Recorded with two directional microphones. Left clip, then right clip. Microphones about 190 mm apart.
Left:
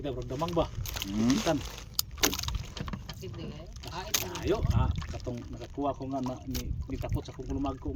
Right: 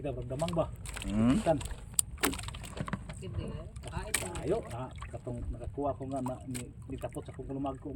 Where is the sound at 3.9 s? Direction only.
45° left (ahead or behind).